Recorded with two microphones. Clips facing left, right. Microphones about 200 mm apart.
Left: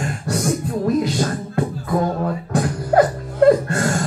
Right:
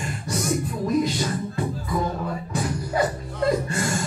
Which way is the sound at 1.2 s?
55° left (ahead or behind).